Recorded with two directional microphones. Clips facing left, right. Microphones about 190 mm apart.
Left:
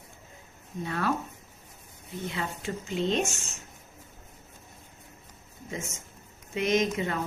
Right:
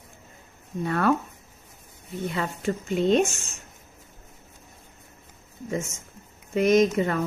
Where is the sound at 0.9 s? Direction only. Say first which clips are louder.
Right 7 dB; 60° right (ahead or behind).